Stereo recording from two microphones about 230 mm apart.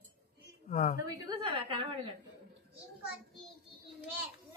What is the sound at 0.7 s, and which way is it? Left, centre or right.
Speech, left.